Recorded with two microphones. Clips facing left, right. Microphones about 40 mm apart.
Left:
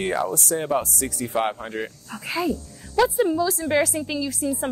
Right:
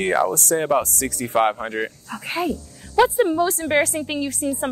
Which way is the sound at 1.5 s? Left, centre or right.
Right.